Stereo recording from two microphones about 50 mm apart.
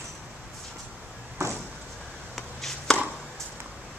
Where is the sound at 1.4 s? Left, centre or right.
Right.